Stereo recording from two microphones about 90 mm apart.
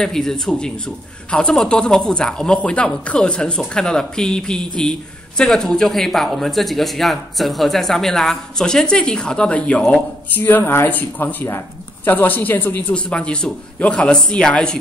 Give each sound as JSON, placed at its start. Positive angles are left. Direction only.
{"t": 0.0, "sound": "a man's voice", "side_deg": 5}
{"t": 10.3, "sound": "speech", "side_deg": 20}